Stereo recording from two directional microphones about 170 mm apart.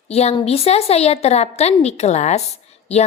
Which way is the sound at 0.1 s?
40° left (ahead or behind).